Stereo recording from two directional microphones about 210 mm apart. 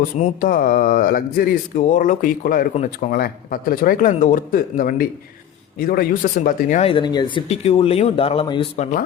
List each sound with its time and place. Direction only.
0.2 s speech: 40° left (ahead or behind)
6.8 s speech: 20° left (ahead or behind)